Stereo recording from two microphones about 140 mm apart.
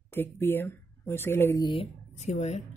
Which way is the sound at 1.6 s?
40° left (ahead or behind).